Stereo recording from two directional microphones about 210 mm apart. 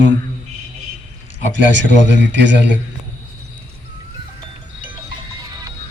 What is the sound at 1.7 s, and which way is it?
A man's voice, 60° right (ahead or behind).